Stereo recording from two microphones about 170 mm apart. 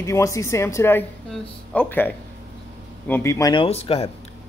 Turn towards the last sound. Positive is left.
turn(degrees=35)  # may be behind; listen again after turning